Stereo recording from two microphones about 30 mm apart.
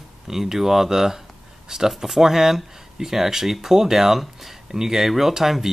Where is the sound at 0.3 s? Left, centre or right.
Centre.